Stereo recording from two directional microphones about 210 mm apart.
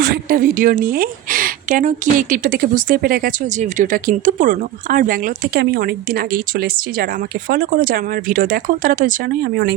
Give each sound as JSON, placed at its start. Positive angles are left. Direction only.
{"t": 0.0, "sound": "speech", "side_deg": -45}